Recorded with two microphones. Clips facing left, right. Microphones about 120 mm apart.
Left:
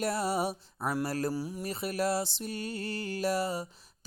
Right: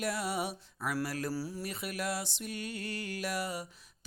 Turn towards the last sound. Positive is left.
turn(degrees=30)  # may be behind; listen again after turning